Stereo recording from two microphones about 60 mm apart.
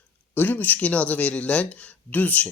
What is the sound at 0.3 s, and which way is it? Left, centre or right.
Speech, left.